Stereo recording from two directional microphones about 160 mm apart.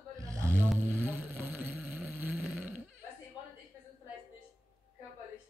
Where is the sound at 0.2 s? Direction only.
20° right (ahead or behind).